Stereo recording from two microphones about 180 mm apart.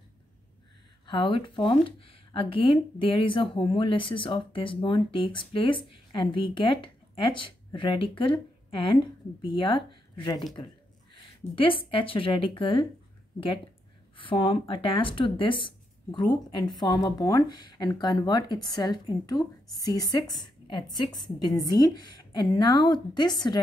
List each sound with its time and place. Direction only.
1.0 s speech: 25° left (ahead or behind)
14.1 s speech: 30° left (ahead or behind)